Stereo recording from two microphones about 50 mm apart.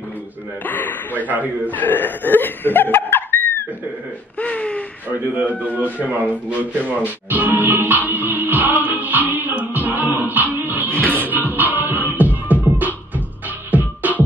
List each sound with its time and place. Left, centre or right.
0.7 s a man's voice: left
4.4 s a sound: left
5.2 s speech: right
7.0 s music: right